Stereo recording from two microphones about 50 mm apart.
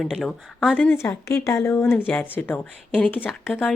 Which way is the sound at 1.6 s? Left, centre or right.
Left.